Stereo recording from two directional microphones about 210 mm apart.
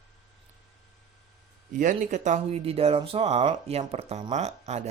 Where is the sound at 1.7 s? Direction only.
35° right (ahead or behind).